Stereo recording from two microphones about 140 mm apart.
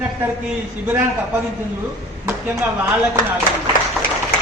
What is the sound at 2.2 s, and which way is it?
Speech, 20° right (ahead or behind).